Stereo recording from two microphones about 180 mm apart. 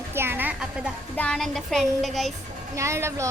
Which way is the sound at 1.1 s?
5° left (ahead or behind).